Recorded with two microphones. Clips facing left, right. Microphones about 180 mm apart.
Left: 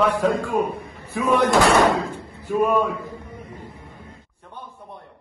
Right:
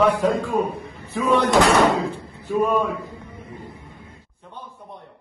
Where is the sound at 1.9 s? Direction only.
20° right (ahead or behind).